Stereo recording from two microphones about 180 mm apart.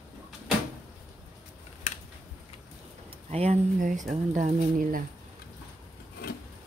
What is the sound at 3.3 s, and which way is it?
Speech, 35° right (ahead or behind).